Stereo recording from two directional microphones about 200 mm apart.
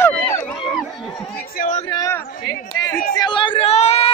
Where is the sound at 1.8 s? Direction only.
15° left (ahead or behind).